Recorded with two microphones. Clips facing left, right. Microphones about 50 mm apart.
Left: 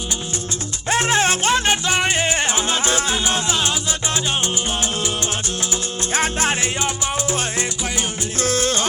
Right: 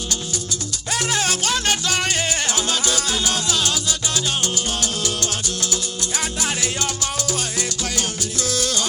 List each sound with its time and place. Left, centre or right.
0.9 s music: left
6.1 s music: left